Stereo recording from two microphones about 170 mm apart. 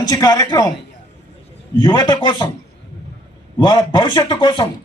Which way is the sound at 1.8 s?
25° left (ahead or behind).